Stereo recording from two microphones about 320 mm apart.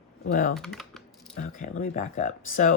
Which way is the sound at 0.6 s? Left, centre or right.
Centre.